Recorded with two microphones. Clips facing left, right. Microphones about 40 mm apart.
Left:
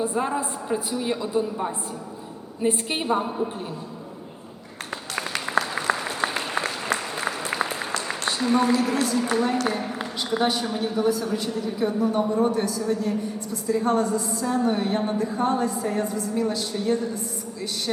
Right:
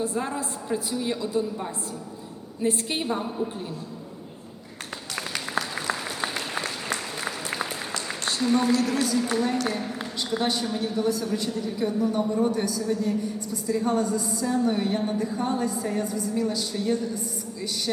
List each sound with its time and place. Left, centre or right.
0.0 s a woman's voice: centre
5.7 s applause: centre
7.9 s a woman's voice: centre